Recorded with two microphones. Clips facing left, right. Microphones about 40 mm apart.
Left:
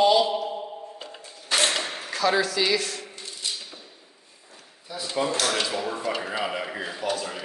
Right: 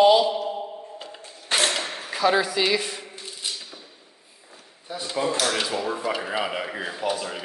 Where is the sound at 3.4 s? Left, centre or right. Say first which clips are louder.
Even; centre.